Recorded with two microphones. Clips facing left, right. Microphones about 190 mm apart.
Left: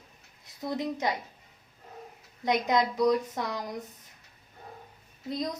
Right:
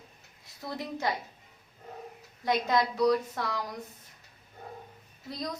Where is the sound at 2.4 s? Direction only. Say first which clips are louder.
Left 1 dB; 20° left (ahead or behind).